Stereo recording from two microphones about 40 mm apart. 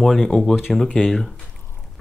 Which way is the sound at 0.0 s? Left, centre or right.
Centre.